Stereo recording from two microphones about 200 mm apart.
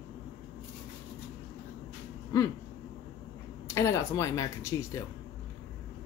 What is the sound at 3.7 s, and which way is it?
Speech, 15° left (ahead or behind).